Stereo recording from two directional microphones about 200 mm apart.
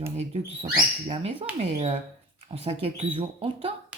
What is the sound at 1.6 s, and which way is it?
Speech, 35° right (ahead or behind).